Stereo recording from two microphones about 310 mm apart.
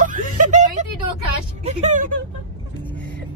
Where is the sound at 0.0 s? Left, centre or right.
Right.